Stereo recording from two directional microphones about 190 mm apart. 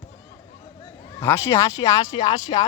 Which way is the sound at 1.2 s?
15° left (ahead or behind).